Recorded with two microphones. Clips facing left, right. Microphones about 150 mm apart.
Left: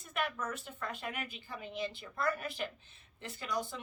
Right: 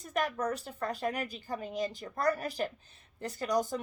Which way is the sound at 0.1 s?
40° right (ahead or behind).